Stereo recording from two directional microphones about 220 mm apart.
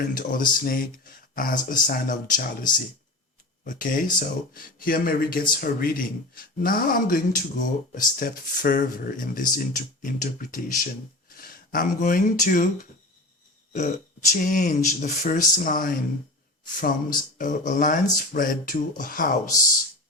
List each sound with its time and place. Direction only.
0.0 s speech: 40° left (ahead or behind)